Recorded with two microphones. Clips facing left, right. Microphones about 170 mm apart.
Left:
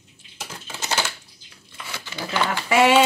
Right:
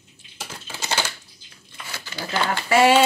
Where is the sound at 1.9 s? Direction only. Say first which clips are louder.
Even; 20° left (ahead or behind).